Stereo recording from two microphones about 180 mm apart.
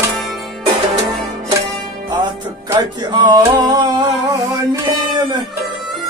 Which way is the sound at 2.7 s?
25° right (ahead or behind).